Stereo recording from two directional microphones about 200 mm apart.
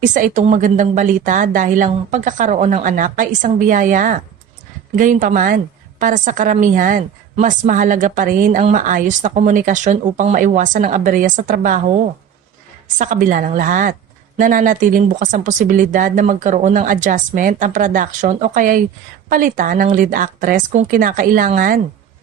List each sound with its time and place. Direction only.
0.0 s a woman's voice: 40° right (ahead or behind)